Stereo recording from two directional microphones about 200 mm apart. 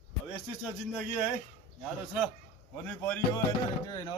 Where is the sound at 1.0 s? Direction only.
5° right (ahead or behind).